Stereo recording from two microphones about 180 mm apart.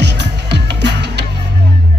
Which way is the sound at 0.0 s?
70° right (ahead or behind).